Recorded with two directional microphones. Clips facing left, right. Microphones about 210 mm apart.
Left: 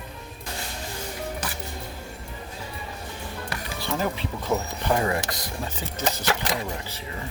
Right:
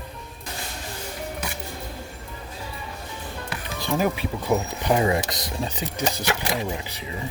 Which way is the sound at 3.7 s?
15° right (ahead or behind).